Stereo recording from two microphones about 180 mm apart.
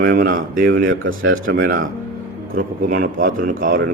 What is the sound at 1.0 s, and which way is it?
Speech, 90° right.